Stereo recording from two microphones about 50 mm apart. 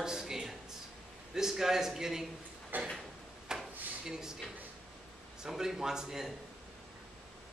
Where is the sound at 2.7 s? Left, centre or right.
Right.